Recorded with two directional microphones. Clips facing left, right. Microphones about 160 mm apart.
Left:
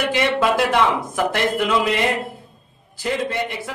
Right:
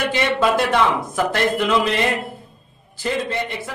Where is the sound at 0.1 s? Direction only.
10° left (ahead or behind).